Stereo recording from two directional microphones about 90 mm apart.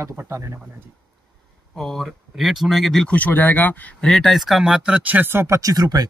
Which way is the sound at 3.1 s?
20° left (ahead or behind).